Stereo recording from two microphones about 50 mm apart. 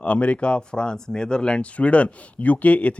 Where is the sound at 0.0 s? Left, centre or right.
Left.